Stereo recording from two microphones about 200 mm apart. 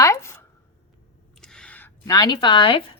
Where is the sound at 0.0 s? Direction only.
15° left (ahead or behind).